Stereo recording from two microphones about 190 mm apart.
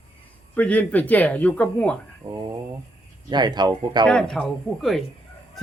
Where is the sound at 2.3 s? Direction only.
20° right (ahead or behind).